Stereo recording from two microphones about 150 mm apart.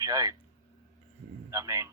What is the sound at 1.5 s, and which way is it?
Speech, 20° right (ahead or behind).